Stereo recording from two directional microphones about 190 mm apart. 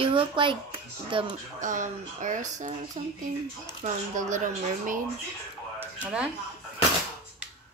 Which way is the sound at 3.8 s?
40° right (ahead or behind).